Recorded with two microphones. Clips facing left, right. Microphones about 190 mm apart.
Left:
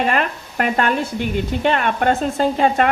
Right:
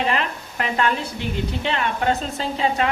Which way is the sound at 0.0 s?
55° left (ahead or behind).